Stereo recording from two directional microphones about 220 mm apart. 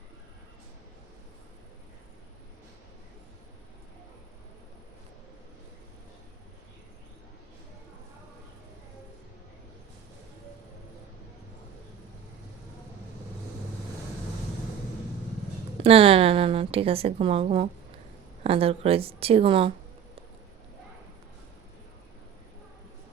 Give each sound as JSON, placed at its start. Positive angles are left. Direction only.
{"t": 15.8, "sound": "a woman's voice", "side_deg": -25}